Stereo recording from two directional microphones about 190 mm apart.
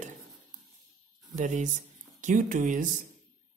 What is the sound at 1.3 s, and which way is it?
Speech, 40° right (ahead or behind).